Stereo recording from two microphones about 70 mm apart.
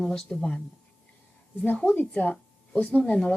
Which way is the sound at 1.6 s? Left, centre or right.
Left.